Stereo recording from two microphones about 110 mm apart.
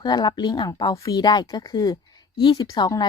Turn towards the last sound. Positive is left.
turn(degrees=35)  # may be behind; listen again after turning